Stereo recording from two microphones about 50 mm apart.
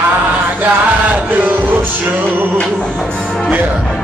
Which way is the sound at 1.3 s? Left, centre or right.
Right.